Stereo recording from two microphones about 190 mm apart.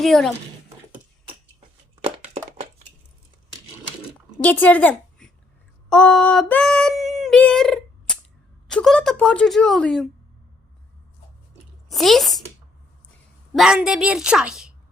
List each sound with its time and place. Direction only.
0.0 s speech: centre (ahead or behind)
2.0 s a sound: 30° right (ahead or behind)
4.4 s a woman's voice: 10° left (ahead or behind)
5.9 s female singing: 5° left (ahead or behind)
8.6 s speech: centre (ahead or behind)
11.9 s speech: centre (ahead or behind)
13.5 s speech: 5° right (ahead or behind)